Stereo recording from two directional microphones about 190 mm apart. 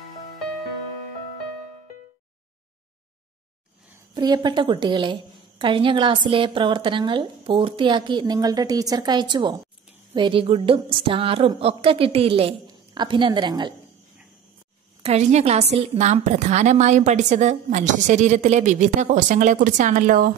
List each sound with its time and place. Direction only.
4.1 s a woman's voice: 20° right (ahead or behind)
15.0 s a woman's voice: 35° right (ahead or behind)